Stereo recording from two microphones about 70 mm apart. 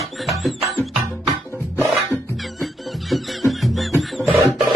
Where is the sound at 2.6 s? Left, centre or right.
Centre.